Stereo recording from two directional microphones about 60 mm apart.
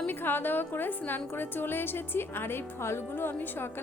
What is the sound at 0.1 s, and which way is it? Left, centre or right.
A woman's voice, left.